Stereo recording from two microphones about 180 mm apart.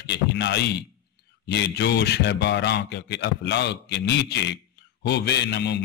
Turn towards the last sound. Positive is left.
turn(degrees=70)  # may be behind; listen again after turning